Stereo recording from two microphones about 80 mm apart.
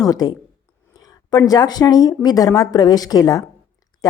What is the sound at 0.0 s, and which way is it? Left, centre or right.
Speech, left.